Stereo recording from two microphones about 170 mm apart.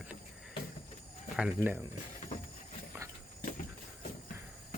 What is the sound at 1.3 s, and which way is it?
Speech, 10° right (ahead or behind).